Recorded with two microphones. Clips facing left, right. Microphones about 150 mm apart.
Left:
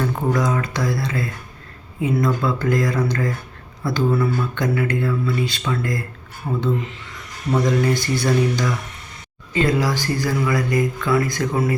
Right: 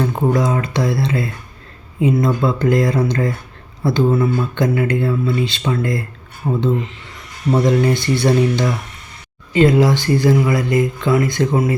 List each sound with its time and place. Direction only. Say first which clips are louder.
0.0 s speech: right 4 dB; 25° right (ahead or behind)
7.5 s speech: right 3 dB; 25° right (ahead or behind)